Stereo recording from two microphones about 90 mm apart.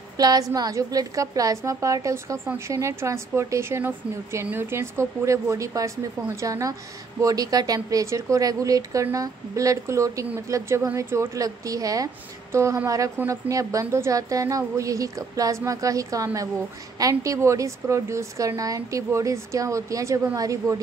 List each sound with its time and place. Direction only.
0.2 s a woman's voice: 45° right (ahead or behind)